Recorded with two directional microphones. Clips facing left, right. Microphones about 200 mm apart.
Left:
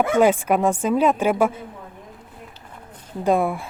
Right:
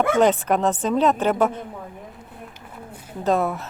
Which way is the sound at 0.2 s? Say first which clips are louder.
Left 3 dB; 10° left (ahead or behind).